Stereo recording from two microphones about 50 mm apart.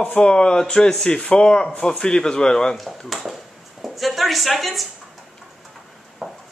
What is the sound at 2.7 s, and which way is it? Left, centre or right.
Speech, centre.